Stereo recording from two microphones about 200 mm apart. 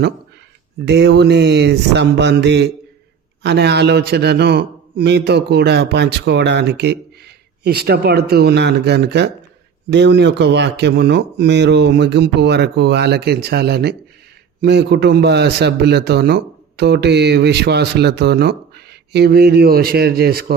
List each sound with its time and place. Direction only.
0.9 s a man's voice: 60° right (ahead or behind)